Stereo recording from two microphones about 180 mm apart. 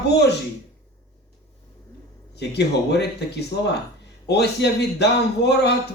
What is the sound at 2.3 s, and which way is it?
Speech, 70° left (ahead or behind).